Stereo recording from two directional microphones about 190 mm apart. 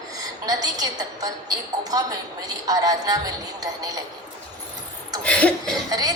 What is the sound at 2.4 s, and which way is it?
A woman's voice, 20° right (ahead or behind).